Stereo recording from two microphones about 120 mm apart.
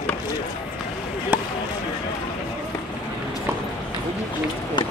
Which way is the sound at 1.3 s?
15° right (ahead or behind).